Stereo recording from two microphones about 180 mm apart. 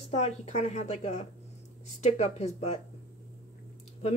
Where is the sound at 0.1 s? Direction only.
40° left (ahead or behind).